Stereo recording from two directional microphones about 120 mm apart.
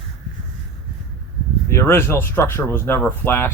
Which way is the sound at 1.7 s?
20° left (ahead or behind).